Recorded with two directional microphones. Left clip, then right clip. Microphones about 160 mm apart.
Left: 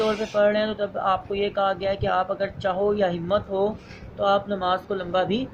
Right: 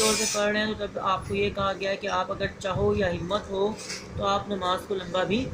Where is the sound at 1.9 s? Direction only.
50° left (ahead or behind).